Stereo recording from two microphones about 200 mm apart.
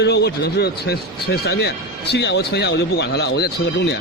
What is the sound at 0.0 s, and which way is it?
A man's voice, 55° left (ahead or behind).